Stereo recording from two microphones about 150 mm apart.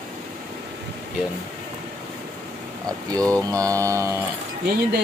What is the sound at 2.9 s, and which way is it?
Mantra, 25° right (ahead or behind).